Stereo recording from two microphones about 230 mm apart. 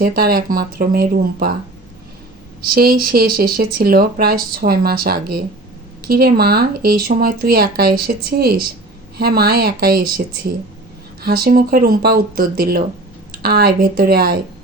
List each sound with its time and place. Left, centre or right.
0.0 s speech: right
2.6 s speech: right